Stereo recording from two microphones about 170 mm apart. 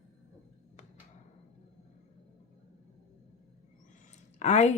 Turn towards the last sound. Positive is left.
turn(degrees=40)  # may be behind; listen again after turning